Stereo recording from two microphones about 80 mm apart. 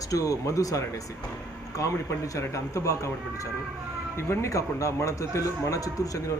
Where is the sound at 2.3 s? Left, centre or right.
Left.